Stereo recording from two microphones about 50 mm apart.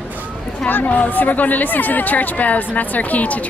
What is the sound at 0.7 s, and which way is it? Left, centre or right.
A woman's voice, left.